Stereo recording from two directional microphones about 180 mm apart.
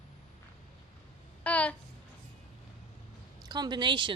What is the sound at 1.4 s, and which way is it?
Babbling, 5° left (ahead or behind).